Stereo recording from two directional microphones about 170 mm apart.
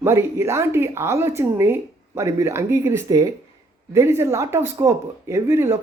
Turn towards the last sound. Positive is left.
turn(degrees=-15)  # may be behind; listen again after turning